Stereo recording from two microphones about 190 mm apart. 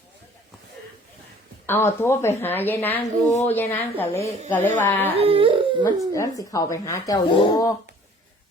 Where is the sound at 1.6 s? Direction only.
10° left (ahead or behind).